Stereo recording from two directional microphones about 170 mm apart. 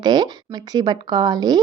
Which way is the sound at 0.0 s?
25° right (ahead or behind).